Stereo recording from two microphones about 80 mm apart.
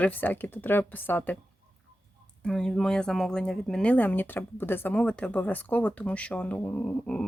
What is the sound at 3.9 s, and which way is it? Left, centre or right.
Speech, centre.